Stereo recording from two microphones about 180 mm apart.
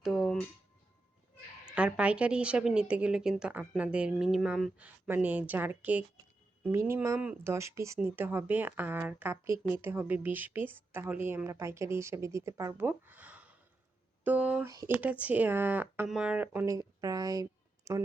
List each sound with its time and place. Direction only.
0.0 s music: centre (ahead or behind)
1.7 s a woman's voice: 5° right (ahead or behind)
14.7 s speech: 20° right (ahead or behind)
15.0 s a woman's voice: 10° right (ahead or behind)